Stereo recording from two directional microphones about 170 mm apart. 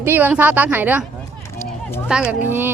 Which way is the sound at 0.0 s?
10° right (ahead or behind).